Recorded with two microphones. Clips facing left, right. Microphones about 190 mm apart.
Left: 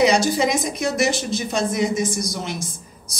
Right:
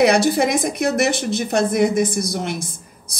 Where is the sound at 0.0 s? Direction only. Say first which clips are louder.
Right 2 dB; 60° right (ahead or behind).